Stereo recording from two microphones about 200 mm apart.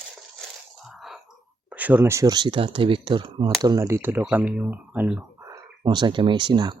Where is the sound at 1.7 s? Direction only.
10° right (ahead or behind).